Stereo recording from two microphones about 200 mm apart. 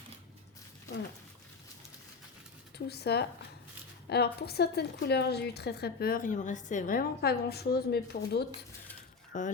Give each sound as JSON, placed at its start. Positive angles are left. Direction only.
{"t": 2.7, "sound": "speech", "side_deg": 55}
{"t": 9.3, "sound": "speech", "side_deg": 40}